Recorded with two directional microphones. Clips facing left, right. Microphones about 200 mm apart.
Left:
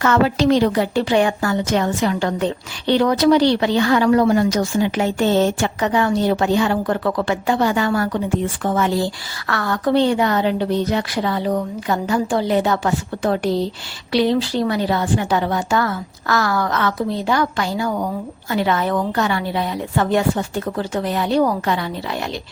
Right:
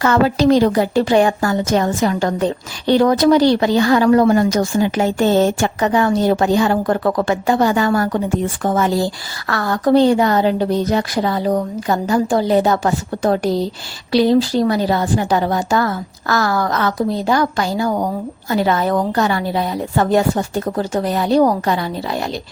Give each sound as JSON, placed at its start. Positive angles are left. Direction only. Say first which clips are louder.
{"t": 0.0, "sound": "a woman's voice", "louder": "right 2 dB", "side_deg": -35}